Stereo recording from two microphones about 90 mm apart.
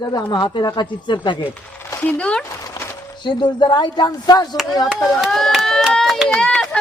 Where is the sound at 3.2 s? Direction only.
55° left (ahead or behind).